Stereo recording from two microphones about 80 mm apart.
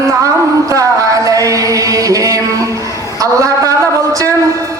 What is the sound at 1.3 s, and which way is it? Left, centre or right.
Chant, right.